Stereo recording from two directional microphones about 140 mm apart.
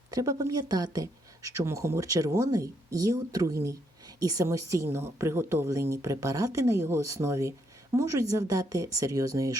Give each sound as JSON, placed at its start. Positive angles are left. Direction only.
{"t": 0.1, "sound": "speech", "side_deg": -25}